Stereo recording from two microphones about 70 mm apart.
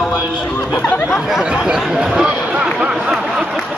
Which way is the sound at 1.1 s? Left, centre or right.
Centre.